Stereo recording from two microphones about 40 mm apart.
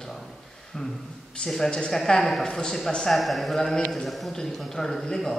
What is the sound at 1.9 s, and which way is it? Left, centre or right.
Speech, centre.